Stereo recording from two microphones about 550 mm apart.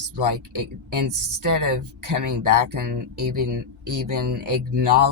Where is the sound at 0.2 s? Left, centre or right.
Right.